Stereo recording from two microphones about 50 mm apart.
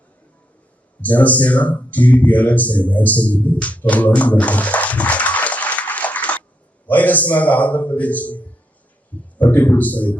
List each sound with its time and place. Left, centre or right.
1.0 s a man's voice: left
9.5 s a man's voice: left